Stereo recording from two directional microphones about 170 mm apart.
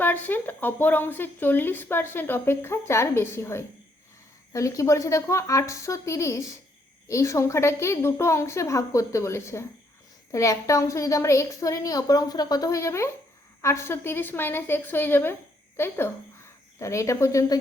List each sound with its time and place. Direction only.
0.0 s a woman's voice: 10° left (ahead or behind)